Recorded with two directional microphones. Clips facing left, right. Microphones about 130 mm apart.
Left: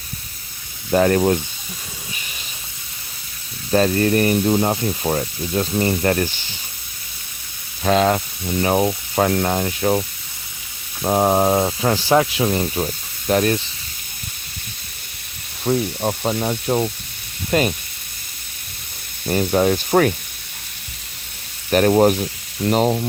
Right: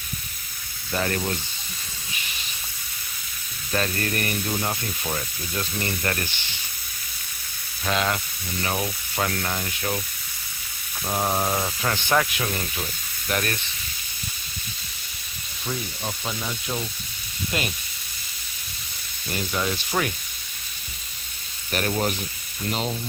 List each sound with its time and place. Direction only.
0.9 s speech: 40° left (ahead or behind)
3.7 s speech: 35° left (ahead or behind)
7.9 s speech: 35° left (ahead or behind)
11.0 s speech: 40° left (ahead or behind)
15.8 s speech: 60° left (ahead or behind)
16.2 s speech: 50° left (ahead or behind)
19.3 s speech: 50° left (ahead or behind)
21.7 s speech: 45° left (ahead or behind)
22.2 s sizzle: 65° left (ahead or behind)
22.8 s speech: 60° left (ahead or behind)